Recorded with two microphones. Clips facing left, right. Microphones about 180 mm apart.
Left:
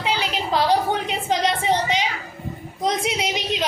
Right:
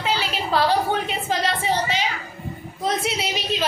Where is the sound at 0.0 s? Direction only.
15° left (ahead or behind).